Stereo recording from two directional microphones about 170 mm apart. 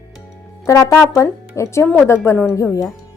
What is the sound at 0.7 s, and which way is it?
Speech, 15° left (ahead or behind).